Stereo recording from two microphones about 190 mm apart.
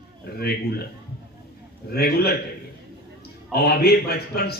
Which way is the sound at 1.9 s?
55° left (ahead or behind).